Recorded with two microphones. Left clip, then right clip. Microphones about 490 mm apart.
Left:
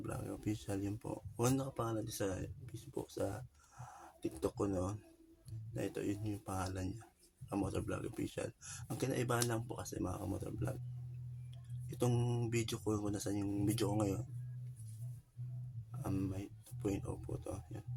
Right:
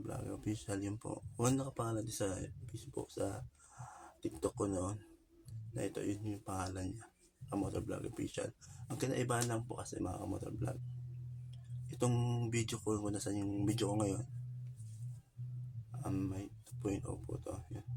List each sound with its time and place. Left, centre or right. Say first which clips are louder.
0.0 s speech: even; left
11.9 s speech: even; left
16.0 s a sound: even; left